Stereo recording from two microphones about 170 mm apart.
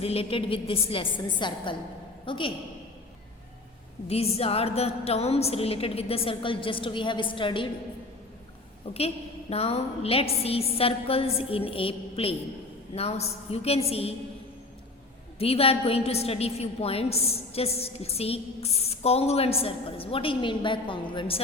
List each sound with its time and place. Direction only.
0.0 s a woman's voice: 35° left (ahead or behind)
4.1 s a woman's voice: 35° left (ahead or behind)
8.9 s a woman's voice: 35° left (ahead or behind)
15.4 s a woman's voice: 35° left (ahead or behind)